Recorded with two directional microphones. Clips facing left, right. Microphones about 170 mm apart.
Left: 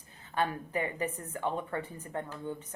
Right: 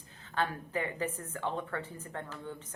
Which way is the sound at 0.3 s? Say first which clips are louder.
Left 2 dB; 15° left (ahead or behind).